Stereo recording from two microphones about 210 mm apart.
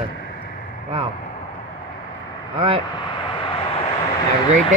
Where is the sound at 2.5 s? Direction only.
25° right (ahead or behind).